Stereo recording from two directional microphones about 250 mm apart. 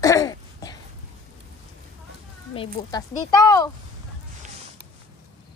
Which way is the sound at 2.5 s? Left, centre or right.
Centre.